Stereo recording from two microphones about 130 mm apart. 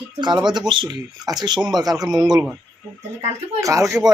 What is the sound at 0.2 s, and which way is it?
Speech, 35° right (ahead or behind).